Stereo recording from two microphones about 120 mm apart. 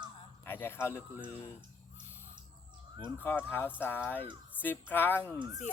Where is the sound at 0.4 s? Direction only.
20° left (ahead or behind).